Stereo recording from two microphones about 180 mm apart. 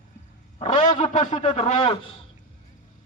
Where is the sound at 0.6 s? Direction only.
35° left (ahead or behind).